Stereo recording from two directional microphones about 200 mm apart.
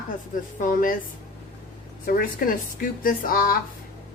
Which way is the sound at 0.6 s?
40° left (ahead or behind).